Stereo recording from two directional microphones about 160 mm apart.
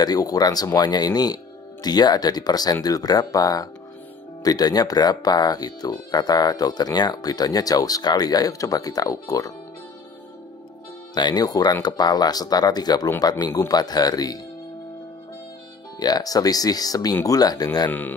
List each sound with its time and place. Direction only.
0.0 s speech: 25° left (ahead or behind)
11.1 s speech: 25° left (ahead or behind)
16.0 s speech: 25° left (ahead or behind)